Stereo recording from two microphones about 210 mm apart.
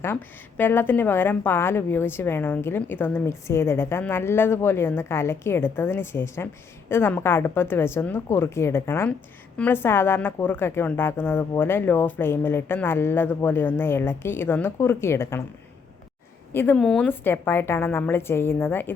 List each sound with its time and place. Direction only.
0.0 s a woman's voice: 10° left (ahead or behind)
16.5 s a woman's voice: 10° left (ahead or behind)